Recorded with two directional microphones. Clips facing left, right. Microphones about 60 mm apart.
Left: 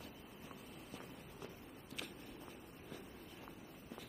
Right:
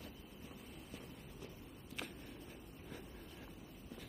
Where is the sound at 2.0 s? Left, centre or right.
Right.